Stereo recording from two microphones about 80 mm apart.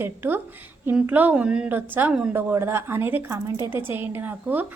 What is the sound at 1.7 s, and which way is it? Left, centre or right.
A woman's voice, right.